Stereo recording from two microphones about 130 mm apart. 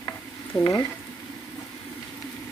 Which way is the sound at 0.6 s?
30° left (ahead or behind).